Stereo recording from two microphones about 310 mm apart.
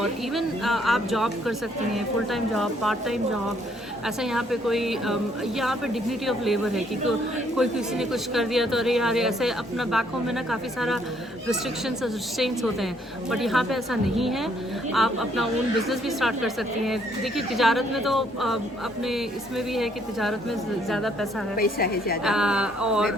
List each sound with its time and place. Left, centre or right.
0.0 s speech: centre
21.5 s a woman's voice: left
22.2 s speech: centre